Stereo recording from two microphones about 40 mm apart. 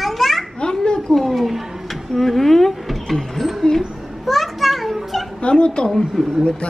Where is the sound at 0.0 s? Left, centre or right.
Centre.